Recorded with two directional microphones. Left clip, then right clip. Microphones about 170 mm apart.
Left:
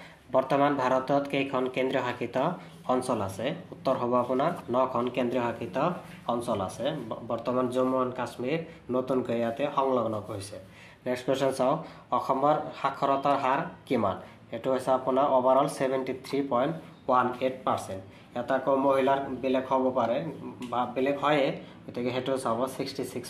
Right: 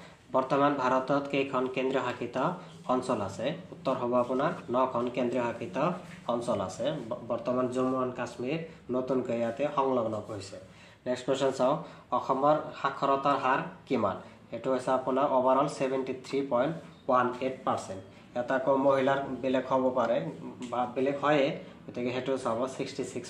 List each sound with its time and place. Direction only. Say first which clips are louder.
0.3 s speech: left 2 dB; 30° left (ahead or behind)
6.4 s speech: left 1 dB; 5° left (ahead or behind)
7.2 s speech: left 1 dB; 20° left (ahead or behind)
11.1 s speech: left 1 dB; 25° left (ahead or behind)
18.3 s speech: left 1 dB; 15° left (ahead or behind)
18.9 s a man's voice: left 1 dB; 5° left (ahead or behind)
20.7 s speech: left 2 dB; 30° left (ahead or behind)